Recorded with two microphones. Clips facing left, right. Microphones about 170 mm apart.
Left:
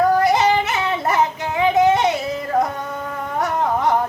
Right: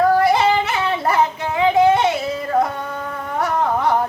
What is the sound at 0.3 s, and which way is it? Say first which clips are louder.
Yodeling: even; 20° left (ahead or behind).